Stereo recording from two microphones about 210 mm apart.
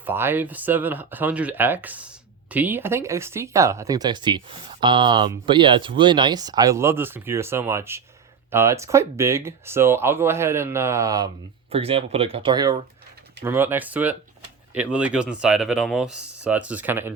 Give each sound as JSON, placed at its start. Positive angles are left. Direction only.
{"t": 0.0, "sound": "speech", "side_deg": -10}
{"t": 11.7, "sound": "speech", "side_deg": -25}
{"t": 13.4, "sound": "speech", "side_deg": -10}